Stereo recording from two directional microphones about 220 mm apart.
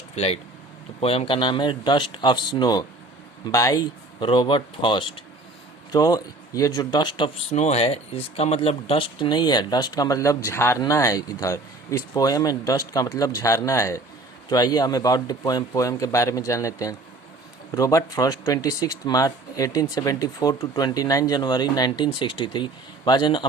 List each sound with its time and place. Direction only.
1.0 s speech: 25° left (ahead or behind)
7.5 s speech: 30° left (ahead or behind)